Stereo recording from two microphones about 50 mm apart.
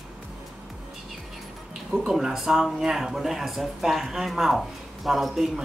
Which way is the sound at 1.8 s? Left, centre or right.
Centre.